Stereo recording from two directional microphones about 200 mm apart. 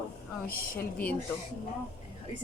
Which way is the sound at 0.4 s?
50° left (ahead or behind).